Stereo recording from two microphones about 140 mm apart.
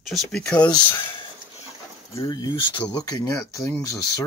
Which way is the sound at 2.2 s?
35° left (ahead or behind).